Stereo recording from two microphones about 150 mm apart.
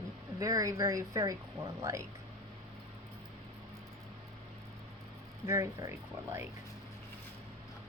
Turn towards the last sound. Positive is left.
turn(degrees=-15)  # may be behind; listen again after turning